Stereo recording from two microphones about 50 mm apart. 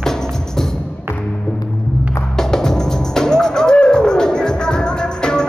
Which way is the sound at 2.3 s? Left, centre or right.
Centre.